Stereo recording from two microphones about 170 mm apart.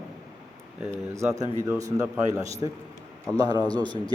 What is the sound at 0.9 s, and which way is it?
A man's voice, 15° right (ahead or behind).